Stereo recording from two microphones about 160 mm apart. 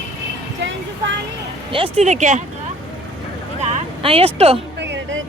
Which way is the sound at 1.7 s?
35° right (ahead or behind).